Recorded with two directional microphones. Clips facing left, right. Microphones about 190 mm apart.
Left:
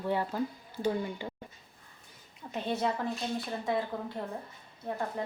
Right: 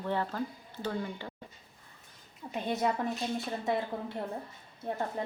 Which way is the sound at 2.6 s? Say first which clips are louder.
Even; 15° right (ahead or behind).